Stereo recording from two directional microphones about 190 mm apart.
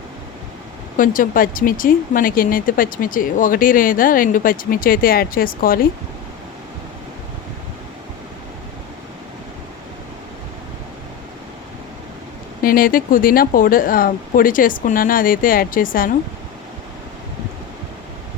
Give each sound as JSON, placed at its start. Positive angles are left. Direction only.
{"t": 0.9, "sound": "speech", "side_deg": 45}
{"t": 12.6, "sound": "speech", "side_deg": 50}